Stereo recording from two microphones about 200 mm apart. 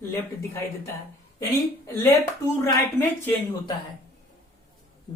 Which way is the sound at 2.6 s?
10° left (ahead or behind).